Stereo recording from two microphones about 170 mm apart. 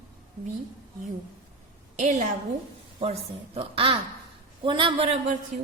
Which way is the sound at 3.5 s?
30° right (ahead or behind).